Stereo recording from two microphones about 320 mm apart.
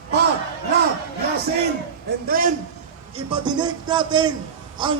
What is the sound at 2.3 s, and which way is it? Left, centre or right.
Speech, right.